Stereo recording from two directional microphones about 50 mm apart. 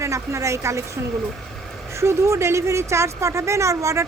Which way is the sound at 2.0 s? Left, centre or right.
Right.